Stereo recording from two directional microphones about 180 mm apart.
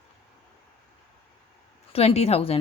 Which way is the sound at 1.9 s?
35° left (ahead or behind).